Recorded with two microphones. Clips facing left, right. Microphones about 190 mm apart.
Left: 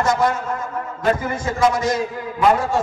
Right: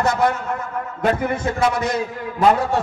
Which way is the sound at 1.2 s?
60° right (ahead or behind).